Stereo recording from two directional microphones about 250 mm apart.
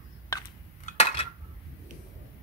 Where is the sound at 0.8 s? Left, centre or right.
Left.